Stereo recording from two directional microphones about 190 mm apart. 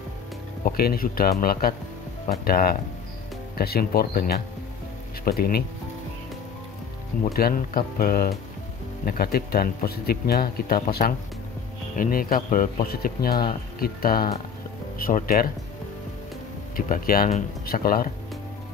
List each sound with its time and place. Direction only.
0.7 s speech: 50° left (ahead or behind)
7.3 s speech: 50° left (ahead or behind)
16.7 s speech: 50° left (ahead or behind)